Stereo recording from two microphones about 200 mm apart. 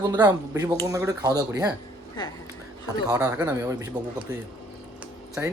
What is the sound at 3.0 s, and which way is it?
Speech, 15° right (ahead or behind).